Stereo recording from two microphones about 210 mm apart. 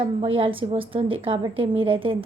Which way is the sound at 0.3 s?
25° right (ahead or behind).